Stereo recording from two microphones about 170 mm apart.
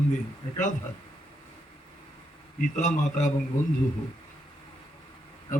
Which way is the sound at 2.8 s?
45° left (ahead or behind).